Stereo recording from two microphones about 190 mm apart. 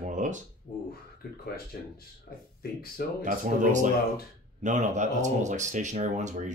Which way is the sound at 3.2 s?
40° right (ahead or behind).